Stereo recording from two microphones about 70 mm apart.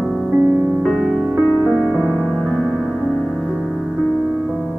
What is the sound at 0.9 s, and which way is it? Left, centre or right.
Music, centre.